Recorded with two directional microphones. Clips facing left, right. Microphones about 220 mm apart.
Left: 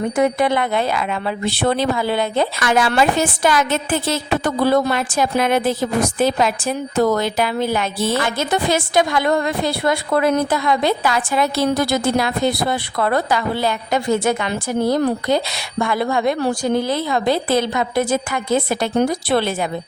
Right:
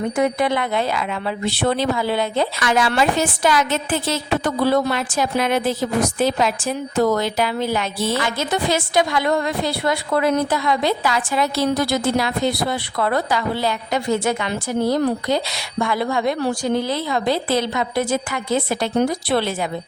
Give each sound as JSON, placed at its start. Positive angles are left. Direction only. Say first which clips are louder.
{"t": 0.2, "sound": "a woman's voice", "louder": "left 3 dB", "side_deg": 50}